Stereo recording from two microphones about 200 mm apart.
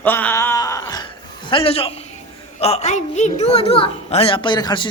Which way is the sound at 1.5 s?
30° left (ahead or behind).